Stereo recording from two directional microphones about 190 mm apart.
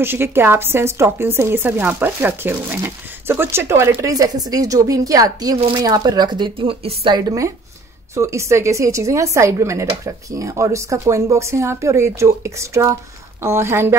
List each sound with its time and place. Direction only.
0.0 s speech: 10° right (ahead or behind)